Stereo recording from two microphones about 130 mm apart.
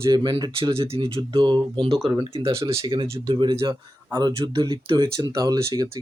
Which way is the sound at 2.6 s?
25° right (ahead or behind).